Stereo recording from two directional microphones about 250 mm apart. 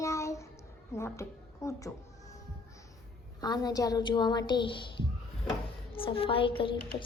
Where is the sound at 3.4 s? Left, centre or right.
Centre.